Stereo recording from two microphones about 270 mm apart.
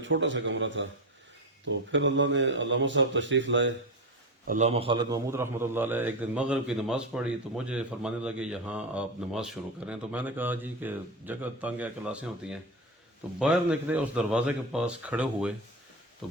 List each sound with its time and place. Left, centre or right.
0.0 s speech: right
4.4 s a man's voice: right; by 15.5 s centre
16.2 s pig: centre